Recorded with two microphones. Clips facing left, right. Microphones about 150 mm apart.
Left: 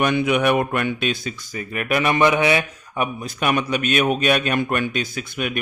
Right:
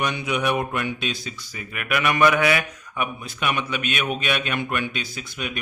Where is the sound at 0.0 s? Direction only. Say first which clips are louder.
Left 6 dB; 55° left (ahead or behind).